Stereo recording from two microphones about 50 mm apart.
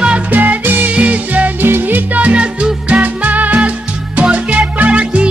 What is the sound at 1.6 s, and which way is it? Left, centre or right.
Music, right.